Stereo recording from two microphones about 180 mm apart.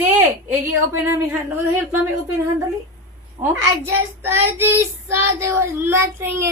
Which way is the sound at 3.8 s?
15° right (ahead or behind).